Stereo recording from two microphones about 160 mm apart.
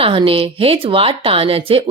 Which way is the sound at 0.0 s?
35° right (ahead or behind).